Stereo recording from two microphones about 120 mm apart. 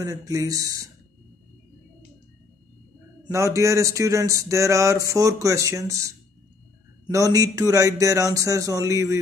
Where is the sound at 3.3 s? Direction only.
25° right (ahead or behind).